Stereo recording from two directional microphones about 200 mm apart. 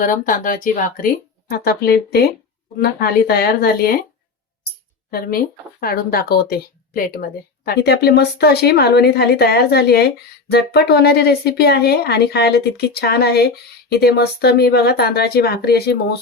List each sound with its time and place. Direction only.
0.0 s speech: 40° left (ahead or behind)
5.8 s speech: 50° left (ahead or behind)